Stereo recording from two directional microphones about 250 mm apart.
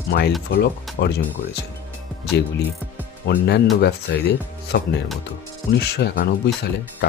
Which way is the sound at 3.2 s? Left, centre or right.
Left.